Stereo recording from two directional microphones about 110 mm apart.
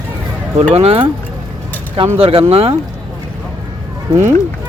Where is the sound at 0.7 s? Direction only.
60° right (ahead or behind).